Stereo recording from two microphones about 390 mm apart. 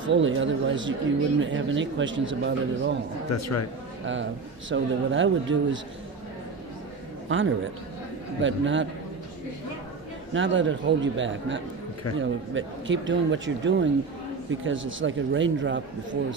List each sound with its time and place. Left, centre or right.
0.1 s a man's voice: right
3.3 s a man's voice: left
4.0 s a man's voice: right
7.2 s a man's voice: right
10.3 s a man's voice: right